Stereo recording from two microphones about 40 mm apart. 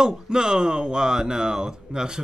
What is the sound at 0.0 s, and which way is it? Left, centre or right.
Speech, centre.